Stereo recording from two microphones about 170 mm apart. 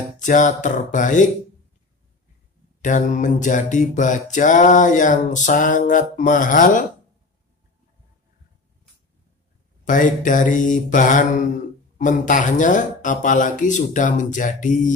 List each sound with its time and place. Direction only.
0.2 s mantra: 45° left (ahead or behind)
2.8 s mantra: 45° left (ahead or behind)
9.8 s mantra: 50° left (ahead or behind)